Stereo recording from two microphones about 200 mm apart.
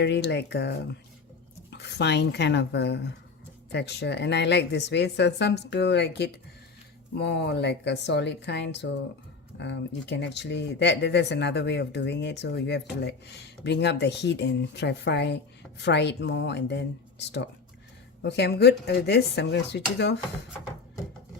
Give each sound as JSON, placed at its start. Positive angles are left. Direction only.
{"t": 0.0, "sound": "speech", "side_deg": 55}